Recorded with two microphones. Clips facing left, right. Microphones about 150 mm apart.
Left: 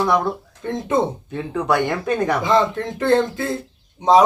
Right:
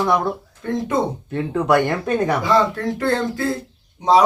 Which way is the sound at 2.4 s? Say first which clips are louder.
Even; 20° left (ahead or behind).